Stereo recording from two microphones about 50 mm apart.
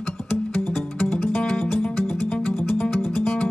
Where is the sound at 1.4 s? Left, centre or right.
Centre.